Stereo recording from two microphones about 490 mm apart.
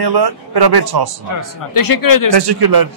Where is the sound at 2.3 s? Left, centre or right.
Right.